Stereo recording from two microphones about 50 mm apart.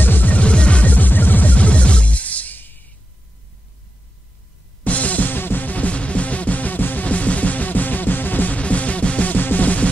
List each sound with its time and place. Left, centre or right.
0.0 s music: left
4.8 s music: left